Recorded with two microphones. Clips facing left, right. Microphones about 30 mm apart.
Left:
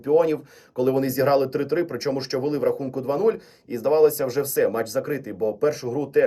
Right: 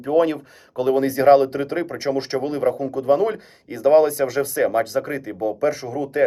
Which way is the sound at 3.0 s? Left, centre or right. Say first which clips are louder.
Right 3 dB; right.